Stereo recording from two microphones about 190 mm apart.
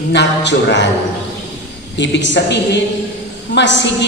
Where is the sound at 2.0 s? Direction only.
70° left (ahead or behind).